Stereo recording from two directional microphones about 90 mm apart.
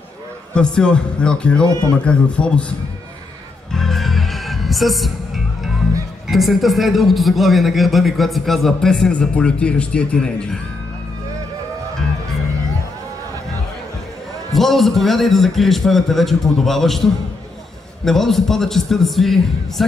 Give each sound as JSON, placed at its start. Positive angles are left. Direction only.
{"t": 0.6, "sound": "a man's voice", "side_deg": 10}
{"t": 3.7, "sound": "music", "side_deg": 5}
{"t": 6.2, "sound": "a man's voice", "side_deg": 0}
{"t": 14.5, "sound": "a man's voice", "side_deg": 0}